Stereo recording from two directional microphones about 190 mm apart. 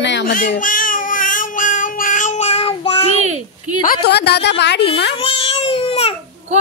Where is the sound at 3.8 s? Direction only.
55° left (ahead or behind).